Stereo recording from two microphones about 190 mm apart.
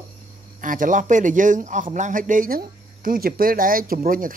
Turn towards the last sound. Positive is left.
turn(degrees=-50)  # may be behind; listen again after turning